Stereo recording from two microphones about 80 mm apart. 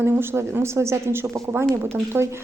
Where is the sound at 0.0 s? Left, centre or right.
Right.